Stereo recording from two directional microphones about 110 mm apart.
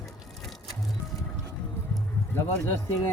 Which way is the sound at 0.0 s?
Centre (ahead or behind).